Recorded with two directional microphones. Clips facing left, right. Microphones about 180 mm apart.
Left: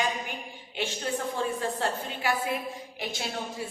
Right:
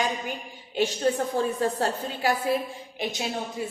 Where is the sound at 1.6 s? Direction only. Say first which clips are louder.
Right 4 dB; 40° right (ahead or behind).